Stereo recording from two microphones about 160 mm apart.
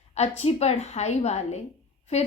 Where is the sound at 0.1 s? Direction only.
45° left (ahead or behind).